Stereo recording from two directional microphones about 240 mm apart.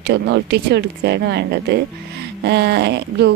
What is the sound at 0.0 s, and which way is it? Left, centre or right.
Speech, right.